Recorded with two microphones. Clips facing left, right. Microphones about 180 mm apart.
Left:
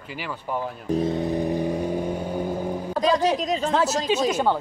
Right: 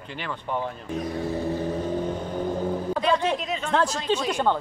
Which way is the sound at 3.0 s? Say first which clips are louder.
Left 5 dB; 35° left (ahead or behind).